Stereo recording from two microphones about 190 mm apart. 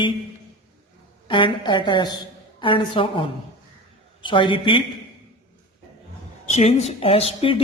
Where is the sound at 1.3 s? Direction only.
25° left (ahead or behind).